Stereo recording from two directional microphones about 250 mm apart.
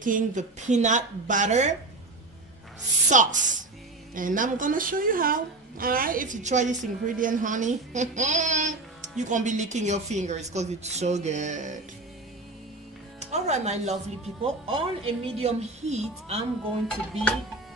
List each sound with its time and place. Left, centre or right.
0.0 s speech: right
3.1 s speech: right
13.2 s speech: right
16.8 s music: centre